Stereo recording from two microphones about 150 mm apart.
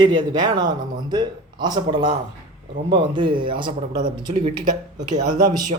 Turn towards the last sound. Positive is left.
turn(degrees=-60)  # may be behind; listen again after turning